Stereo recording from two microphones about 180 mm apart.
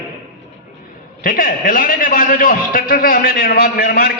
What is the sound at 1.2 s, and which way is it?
A man's voice, 50° left (ahead or behind).